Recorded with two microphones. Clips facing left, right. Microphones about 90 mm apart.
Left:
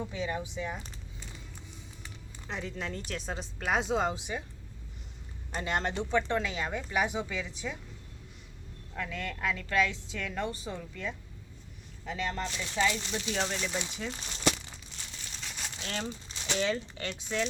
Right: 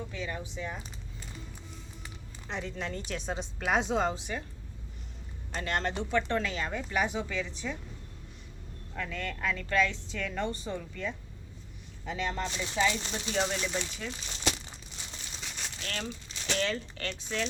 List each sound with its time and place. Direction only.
0.0 s speech: 15° left (ahead or behind)
0.5 s a sound: 5° left (ahead or behind)
2.5 s a woman's voice: centre (ahead or behind)
5.5 s speech: 15° left (ahead or behind)
9.0 s a woman's voice: 5° left (ahead or behind)
13.7 s speech: 10° left (ahead or behind)
15.0 s crumpling: 15° right (ahead or behind)
15.4 s crumpling: centre (ahead or behind)
15.8 s crumpling: 20° left (ahead or behind)
16.4 s speech: 15° left (ahead or behind)